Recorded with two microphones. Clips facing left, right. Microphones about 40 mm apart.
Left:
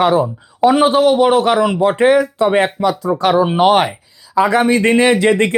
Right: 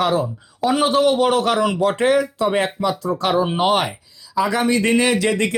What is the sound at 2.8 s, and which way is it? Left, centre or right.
Speech, centre.